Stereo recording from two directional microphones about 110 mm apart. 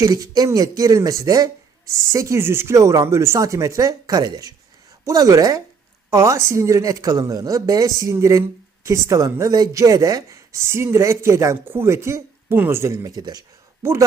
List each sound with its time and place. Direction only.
0.0 s a woman's voice: 35° right (ahead or behind)